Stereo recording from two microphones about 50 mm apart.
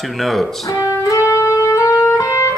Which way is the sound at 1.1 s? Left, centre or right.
Left.